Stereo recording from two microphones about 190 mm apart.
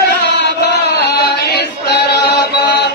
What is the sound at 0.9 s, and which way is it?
Chant, 60° left (ahead or behind).